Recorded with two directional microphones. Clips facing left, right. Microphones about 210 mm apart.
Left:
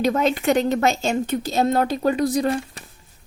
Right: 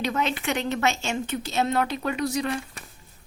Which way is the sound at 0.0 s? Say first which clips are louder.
Left 7 dB; 40° left (ahead or behind).